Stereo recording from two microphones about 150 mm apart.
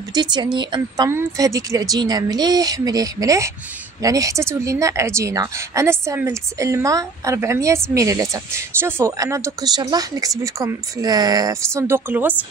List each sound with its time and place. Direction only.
0.1 s speech: 30° right (ahead or behind); by 12.4 s 10° right (ahead or behind)